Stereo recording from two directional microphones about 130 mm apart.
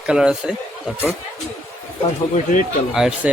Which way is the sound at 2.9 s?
5° right (ahead or behind).